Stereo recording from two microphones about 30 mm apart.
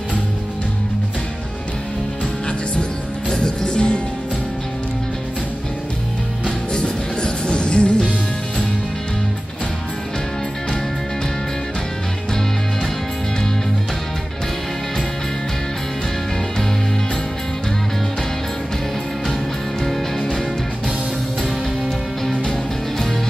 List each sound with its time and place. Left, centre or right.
3.3 s music: left
6.4 s music: left